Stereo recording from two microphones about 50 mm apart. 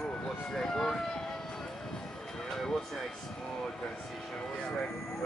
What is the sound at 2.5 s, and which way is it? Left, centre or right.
Speech, centre.